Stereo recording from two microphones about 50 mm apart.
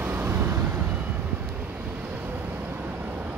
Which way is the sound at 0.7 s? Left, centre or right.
Right.